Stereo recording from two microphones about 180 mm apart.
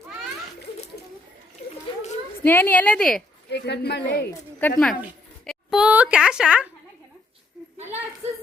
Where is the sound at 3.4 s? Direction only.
70° left (ahead or behind).